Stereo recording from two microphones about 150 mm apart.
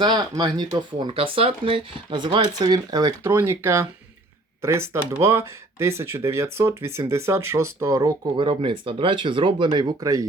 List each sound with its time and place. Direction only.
0.0 s speech: 30° right (ahead or behind)
8.4 s speech: 35° right (ahead or behind)